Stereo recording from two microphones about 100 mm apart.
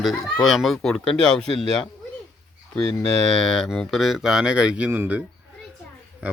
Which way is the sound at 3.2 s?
5° left (ahead or behind).